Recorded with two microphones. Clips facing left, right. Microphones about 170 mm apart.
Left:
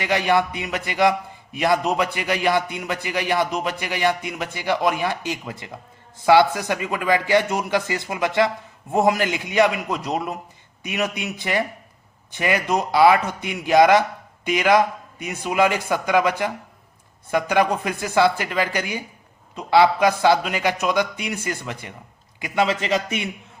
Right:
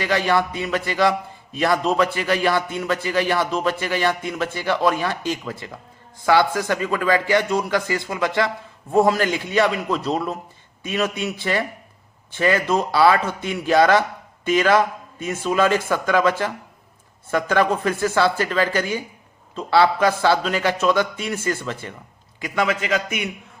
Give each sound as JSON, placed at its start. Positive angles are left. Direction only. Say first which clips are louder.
{"t": 0.0, "sound": "a man's voice", "louder": "even", "side_deg": 20}